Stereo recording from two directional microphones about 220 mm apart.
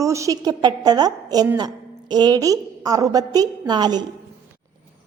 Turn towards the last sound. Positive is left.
turn(degrees=-20)  # may be behind; listen again after turning